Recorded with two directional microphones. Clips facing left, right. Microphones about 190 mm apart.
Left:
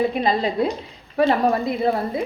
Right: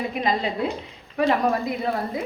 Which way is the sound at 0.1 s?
35° left (ahead or behind).